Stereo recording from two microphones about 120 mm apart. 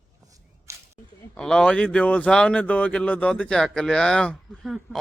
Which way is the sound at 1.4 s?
5° left (ahead or behind).